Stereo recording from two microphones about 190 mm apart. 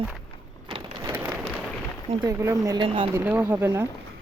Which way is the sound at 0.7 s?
25° right (ahead or behind).